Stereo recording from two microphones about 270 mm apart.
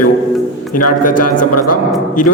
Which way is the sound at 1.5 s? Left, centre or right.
Left.